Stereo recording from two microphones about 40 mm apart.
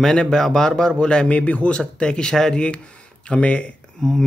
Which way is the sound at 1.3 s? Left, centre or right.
Left.